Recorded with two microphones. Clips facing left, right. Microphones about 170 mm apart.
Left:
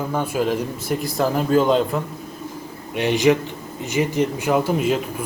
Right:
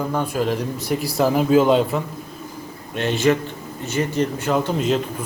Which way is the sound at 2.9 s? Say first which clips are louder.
Left 2 dB; 15° left (ahead or behind).